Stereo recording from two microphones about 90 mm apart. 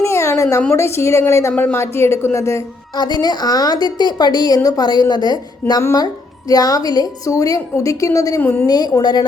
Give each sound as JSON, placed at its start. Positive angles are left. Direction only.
{"t": 0.0, "sound": "a sound", "side_deg": 35}
{"t": 0.7, "sound": "a woman's voice", "side_deg": 30}
{"t": 2.9, "sound": "a woman's voice", "side_deg": 50}